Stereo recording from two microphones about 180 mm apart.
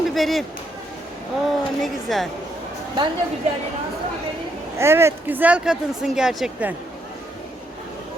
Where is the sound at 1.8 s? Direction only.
Centre (ahead or behind).